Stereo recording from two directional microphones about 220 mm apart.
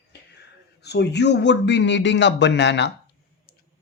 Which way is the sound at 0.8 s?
50° left (ahead or behind).